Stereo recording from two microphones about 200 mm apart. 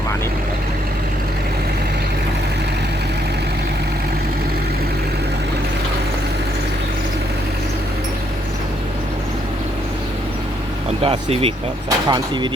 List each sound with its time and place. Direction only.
11.0 s speech: 30° right (ahead or behind)